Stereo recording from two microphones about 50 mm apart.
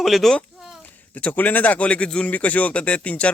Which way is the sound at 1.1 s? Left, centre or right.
Left.